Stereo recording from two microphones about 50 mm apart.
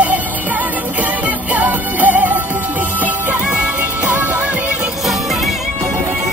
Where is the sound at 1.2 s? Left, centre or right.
Right.